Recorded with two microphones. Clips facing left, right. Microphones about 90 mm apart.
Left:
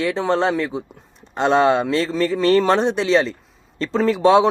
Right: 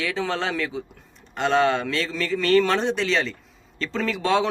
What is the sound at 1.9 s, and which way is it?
A man's voice, 35° left (ahead or behind).